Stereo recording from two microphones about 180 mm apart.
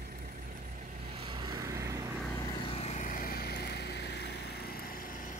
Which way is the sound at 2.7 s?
40° left (ahead or behind).